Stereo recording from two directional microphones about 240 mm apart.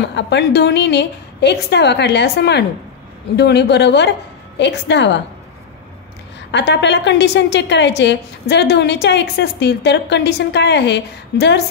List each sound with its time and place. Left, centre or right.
0.1 s a woman's voice: left
6.5 s a woman's voice: left